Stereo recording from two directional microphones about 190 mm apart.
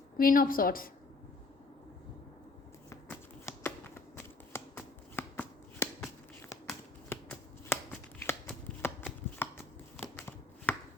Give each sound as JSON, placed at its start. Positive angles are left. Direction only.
{"t": 0.2, "sound": "a woman's voice", "side_deg": 50}
{"t": 2.9, "sound": "shuffling cards", "side_deg": 15}
{"t": 4.5, "sound": "a sound", "side_deg": 10}
{"t": 5.1, "sound": "shuffling cards", "side_deg": 10}
{"t": 7.1, "sound": "shuffling cards", "side_deg": 10}